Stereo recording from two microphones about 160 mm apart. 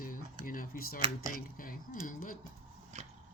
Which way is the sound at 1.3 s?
60° left (ahead or behind).